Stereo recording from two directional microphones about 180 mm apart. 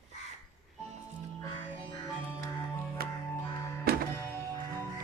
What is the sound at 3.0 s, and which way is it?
Music, 55° right (ahead or behind).